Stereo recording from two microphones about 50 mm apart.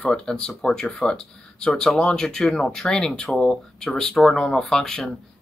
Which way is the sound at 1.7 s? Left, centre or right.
Centre.